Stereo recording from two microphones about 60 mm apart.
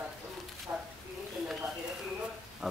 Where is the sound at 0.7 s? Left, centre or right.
Centre.